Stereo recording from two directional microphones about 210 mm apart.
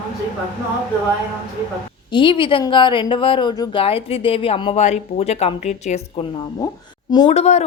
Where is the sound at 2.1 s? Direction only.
25° left (ahead or behind).